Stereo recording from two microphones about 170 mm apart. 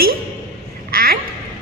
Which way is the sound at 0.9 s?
60° right (ahead or behind).